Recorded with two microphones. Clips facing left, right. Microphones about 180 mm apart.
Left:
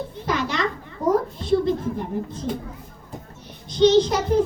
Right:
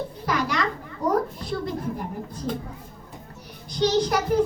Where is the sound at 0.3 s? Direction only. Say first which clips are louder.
Left 1 dB; 25° left (ahead or behind).